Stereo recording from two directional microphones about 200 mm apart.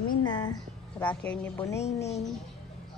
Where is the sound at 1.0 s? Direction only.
10° left (ahead or behind).